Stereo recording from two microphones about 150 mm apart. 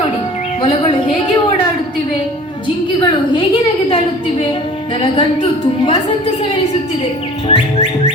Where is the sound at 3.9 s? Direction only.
35° left (ahead or behind).